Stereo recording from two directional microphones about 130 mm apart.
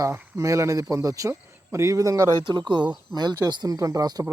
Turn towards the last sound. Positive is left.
turn(degrees=-30)  # may be behind; listen again after turning